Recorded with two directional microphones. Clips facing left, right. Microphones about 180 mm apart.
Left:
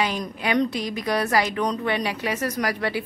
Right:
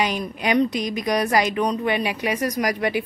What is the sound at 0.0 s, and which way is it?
A woman's voice, 15° right (ahead or behind).